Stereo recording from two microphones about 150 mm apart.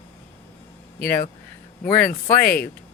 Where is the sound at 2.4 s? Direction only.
85° left.